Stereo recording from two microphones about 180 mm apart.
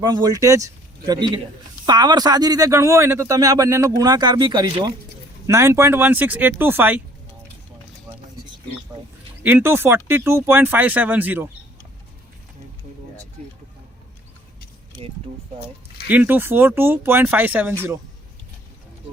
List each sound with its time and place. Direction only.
0.0 s speech: 25° right (ahead or behind)
9.4 s speech: 10° right (ahead or behind)
16.0 s speech: 10° right (ahead or behind)